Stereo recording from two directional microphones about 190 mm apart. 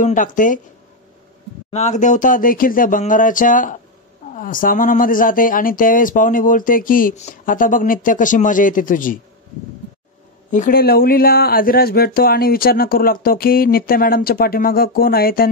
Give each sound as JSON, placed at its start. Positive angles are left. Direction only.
{"t": 0.0, "sound": "speech", "side_deg": 45}
{"t": 1.7, "sound": "speech", "side_deg": 40}
{"t": 10.5, "sound": "speech", "side_deg": 45}